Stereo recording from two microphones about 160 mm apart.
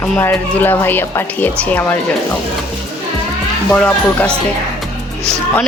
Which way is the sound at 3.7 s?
5° left (ahead or behind).